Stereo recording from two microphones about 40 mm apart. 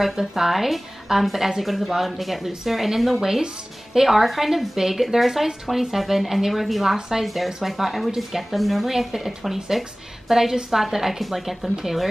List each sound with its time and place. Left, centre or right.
0.0 s speech: centre